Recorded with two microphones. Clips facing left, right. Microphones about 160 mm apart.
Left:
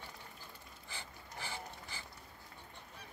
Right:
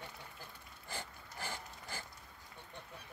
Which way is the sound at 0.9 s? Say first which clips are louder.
Right 4 dB; 45° right (ahead or behind).